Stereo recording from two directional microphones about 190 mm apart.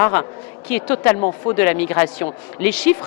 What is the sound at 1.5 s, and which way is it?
Speech, 10° left (ahead or behind).